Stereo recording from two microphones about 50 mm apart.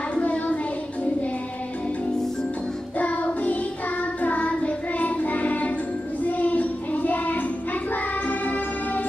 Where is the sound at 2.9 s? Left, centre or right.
Left.